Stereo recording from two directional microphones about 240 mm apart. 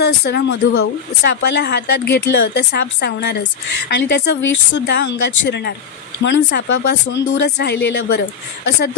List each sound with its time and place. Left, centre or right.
0.0 s speech: left